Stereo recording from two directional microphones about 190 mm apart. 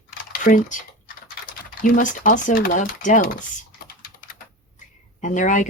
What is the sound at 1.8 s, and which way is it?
Speech, 45° left (ahead or behind).